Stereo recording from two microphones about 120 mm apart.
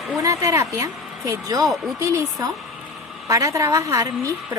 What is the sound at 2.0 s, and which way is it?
Speech, 25° right (ahead or behind).